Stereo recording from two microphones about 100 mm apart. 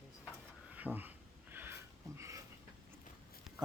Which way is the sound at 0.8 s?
15° right (ahead or behind).